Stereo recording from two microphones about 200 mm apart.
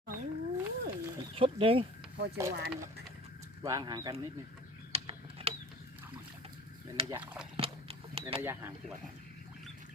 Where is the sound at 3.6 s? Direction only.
20° right (ahead or behind).